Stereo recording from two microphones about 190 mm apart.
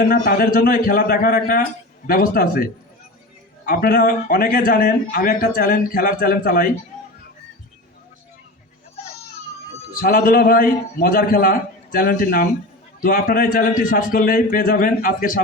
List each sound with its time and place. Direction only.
0.0 s speech: 55° left (ahead or behind)
3.7 s speech: 50° left (ahead or behind)
9.9 s speech: 45° left (ahead or behind)